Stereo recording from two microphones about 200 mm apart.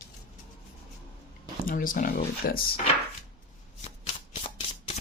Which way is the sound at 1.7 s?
45° left (ahead or behind).